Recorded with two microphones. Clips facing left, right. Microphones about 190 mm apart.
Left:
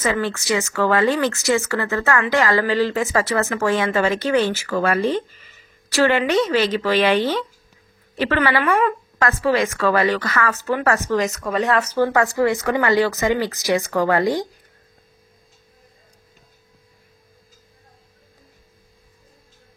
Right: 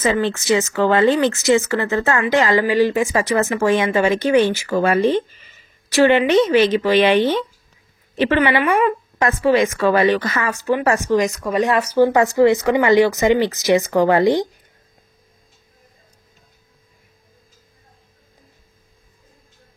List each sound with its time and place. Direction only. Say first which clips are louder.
0.0 s speech: right 3 dB; 25° right (ahead or behind)